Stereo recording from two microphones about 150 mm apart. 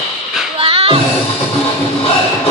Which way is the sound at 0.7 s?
40° right (ahead or behind).